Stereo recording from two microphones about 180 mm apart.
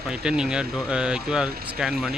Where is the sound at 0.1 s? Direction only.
5° right (ahead or behind).